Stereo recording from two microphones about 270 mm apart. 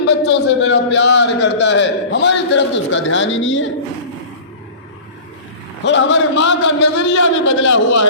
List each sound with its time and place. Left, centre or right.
0.0 s a man's voice: left
5.8 s a man's voice: left